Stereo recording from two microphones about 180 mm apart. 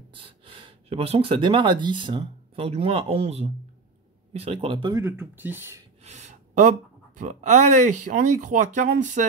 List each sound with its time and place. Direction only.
0.1 s speech: 30° right (ahead or behind)
5.0 s speech: 10° right (ahead or behind)
6.0 s speech: 40° right (ahead or behind)